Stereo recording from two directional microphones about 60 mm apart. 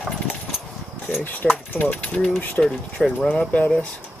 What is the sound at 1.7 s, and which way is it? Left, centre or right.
Speech, left.